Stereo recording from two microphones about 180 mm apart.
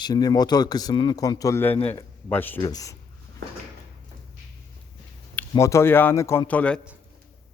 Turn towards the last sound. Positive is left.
turn(degrees=5)  # may be behind; listen again after turning